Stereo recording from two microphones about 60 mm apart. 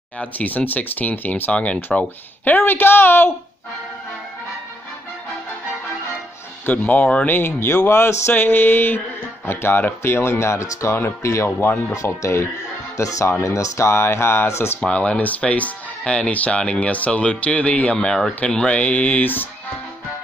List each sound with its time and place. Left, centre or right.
0.2 s speech: left
6.6 s speech: left
8.4 s speech: left
11.0 s speech: left
11.9 s speech: left
14.8 s speech: left